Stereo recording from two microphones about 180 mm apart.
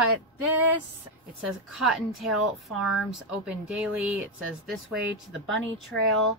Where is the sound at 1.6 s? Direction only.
Centre (ahead or behind).